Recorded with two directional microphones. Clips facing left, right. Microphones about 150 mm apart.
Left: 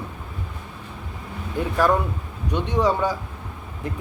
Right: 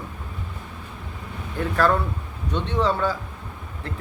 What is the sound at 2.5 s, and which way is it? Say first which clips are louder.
Speech: left 2 dB; 15° left (ahead or behind).